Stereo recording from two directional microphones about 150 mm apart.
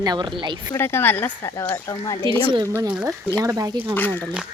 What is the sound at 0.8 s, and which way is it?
Speech, 15° left (ahead or behind).